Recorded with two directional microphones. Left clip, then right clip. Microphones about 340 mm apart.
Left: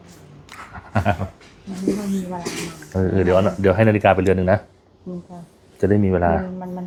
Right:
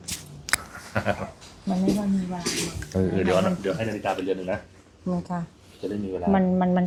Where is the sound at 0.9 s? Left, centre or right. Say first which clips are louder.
Left 5 dB; left.